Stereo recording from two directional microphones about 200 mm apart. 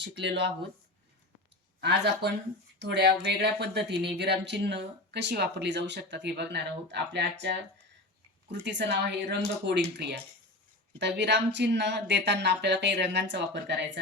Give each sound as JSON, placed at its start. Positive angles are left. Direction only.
{"t": 0.0, "sound": "speech", "side_deg": -60}
{"t": 1.8, "sound": "speech", "side_deg": -60}